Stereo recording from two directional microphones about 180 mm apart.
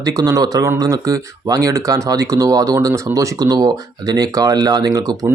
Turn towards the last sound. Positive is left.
turn(degrees=-20)  # may be behind; listen again after turning